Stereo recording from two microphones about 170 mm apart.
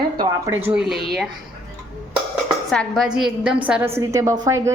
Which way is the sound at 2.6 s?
Centre (ahead or behind).